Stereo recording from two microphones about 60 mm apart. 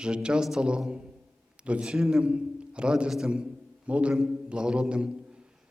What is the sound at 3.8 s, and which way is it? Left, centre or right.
Speech, right.